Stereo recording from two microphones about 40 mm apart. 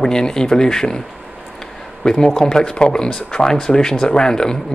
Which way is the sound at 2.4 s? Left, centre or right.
Left.